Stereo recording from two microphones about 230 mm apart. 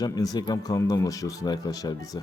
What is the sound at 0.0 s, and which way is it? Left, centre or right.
Speech, centre.